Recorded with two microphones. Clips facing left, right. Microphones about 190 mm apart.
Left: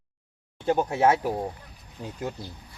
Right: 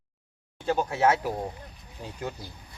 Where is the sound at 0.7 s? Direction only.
15° left (ahead or behind).